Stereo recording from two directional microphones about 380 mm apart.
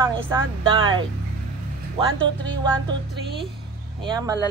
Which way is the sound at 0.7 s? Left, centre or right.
Centre.